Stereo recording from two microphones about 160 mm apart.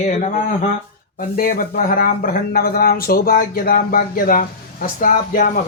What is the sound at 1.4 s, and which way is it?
Speech, 65° left (ahead or behind).